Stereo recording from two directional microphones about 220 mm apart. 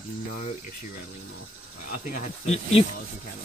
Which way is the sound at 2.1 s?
30° left (ahead or behind).